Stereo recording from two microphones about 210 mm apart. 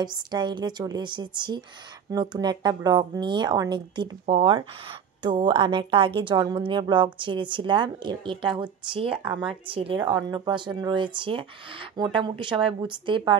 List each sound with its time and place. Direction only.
0.0 s speech: 20° right (ahead or behind)